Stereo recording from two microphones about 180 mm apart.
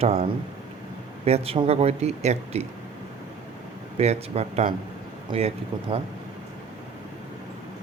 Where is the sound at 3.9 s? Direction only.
35° right (ahead or behind).